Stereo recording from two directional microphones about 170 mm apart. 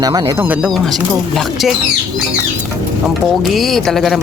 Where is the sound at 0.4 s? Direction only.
10° right (ahead or behind).